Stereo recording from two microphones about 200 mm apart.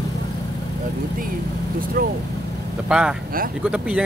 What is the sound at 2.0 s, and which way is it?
Speech, 45° right (ahead or behind).